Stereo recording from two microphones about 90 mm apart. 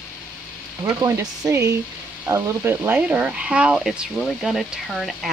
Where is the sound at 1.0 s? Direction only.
35° right (ahead or behind).